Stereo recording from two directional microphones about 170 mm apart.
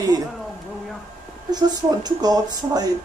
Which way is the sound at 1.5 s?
25° right (ahead or behind).